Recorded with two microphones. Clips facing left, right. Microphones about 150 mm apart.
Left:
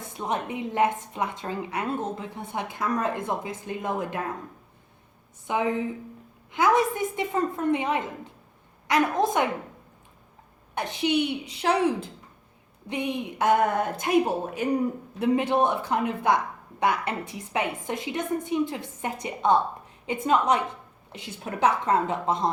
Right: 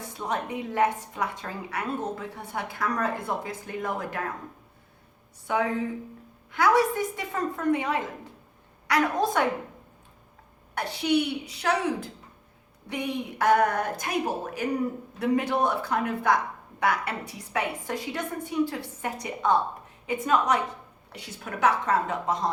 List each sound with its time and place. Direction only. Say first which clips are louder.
0.2 s a woman's voice: left 1 dB; 20° left (ahead or behind)
5.5 s a woman's voice: left 1 dB; 20° left (ahead or behind)
10.8 s a woman's voice: even; 20° left (ahead or behind)
15.2 s a woman's voice: left 2 dB; 25° left (ahead or behind)